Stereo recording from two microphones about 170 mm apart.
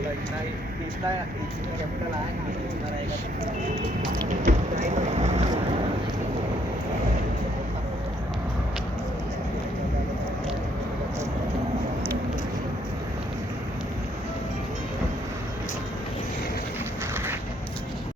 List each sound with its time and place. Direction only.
4.4 s speech: 40° right (ahead or behind)